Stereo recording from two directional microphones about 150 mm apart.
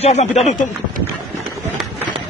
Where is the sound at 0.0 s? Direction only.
45° left (ahead or behind).